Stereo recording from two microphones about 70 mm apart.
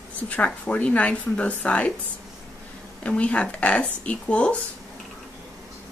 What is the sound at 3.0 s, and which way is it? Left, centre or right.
Speech, centre.